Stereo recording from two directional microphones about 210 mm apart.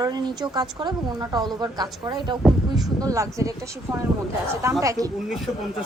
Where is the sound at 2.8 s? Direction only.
15° right (ahead or behind).